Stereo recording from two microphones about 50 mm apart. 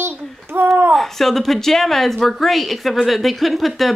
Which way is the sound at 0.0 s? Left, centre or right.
Right.